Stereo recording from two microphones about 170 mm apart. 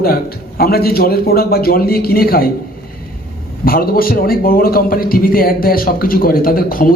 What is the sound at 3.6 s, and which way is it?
A man's voice, 60° left (ahead or behind).